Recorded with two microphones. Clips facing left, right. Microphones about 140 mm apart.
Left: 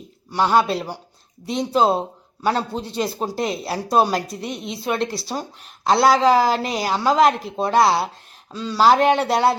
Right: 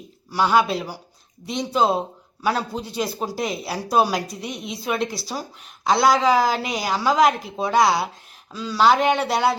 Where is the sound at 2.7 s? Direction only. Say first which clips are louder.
Left 2 dB; 30° left (ahead or behind).